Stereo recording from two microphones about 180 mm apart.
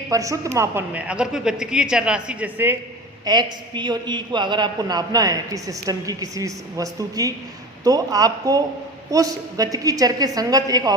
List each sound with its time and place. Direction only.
0.1 s a woman's voice: 20° right (ahead or behind)
3.2 s a man's voice: 25° right (ahead or behind)